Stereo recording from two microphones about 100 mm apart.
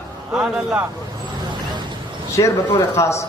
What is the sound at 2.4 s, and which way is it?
Speech, 40° left (ahead or behind).